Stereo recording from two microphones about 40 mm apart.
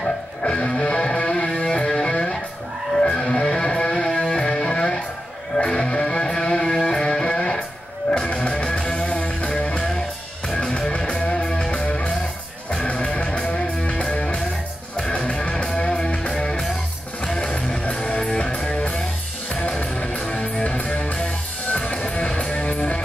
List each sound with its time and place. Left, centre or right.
0.4 s music: left
21.0 s music: left
21.6 s music: left